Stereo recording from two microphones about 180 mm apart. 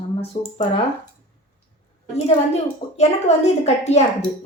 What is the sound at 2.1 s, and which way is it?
A woman's voice, 35° left (ahead or behind).